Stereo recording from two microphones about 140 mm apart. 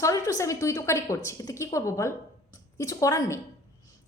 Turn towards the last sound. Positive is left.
turn(degrees=25)  # may be behind; listen again after turning